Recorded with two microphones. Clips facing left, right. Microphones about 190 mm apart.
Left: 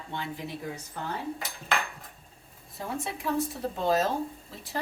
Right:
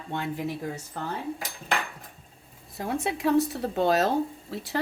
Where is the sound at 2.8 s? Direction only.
75° right (ahead or behind).